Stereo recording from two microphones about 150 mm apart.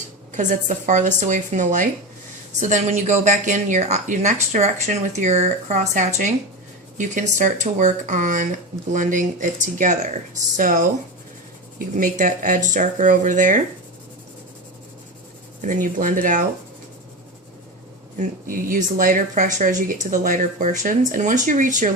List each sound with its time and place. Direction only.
0.3 s speech: 55° right (ahead or behind)
11.9 s speech: 65° right (ahead or behind)
15.6 s speech: 60° right (ahead or behind)
18.2 s speech: 65° right (ahead or behind)